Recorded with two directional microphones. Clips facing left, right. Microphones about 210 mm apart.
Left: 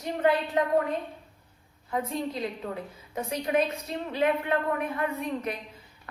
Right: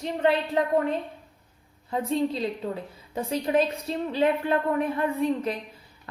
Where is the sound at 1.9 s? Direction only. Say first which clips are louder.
Right 5 dB; 30° right (ahead or behind).